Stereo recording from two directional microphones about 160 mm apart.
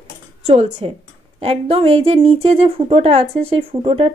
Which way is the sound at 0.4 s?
40° right (ahead or behind).